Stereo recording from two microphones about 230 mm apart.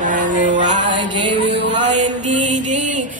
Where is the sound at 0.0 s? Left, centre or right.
Right.